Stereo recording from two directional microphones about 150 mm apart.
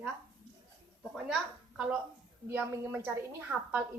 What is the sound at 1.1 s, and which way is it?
A woman's voice, 5° right (ahead or behind).